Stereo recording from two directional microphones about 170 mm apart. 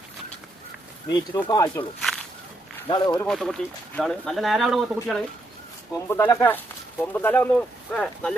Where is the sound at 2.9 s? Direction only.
25° left (ahead or behind).